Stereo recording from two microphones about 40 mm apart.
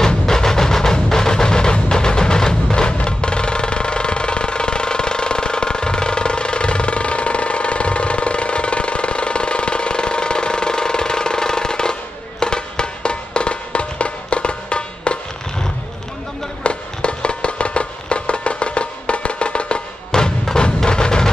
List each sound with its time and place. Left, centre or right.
0.0 s music: centre
16.6 s music: left